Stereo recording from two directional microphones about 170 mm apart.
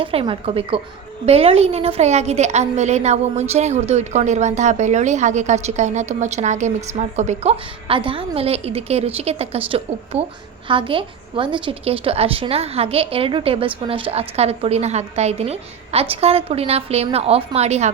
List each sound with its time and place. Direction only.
0.0 s a woman's voice: 30° right (ahead or behind)